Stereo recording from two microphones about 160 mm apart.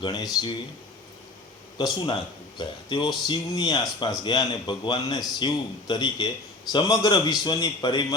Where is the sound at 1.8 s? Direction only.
25° left (ahead or behind).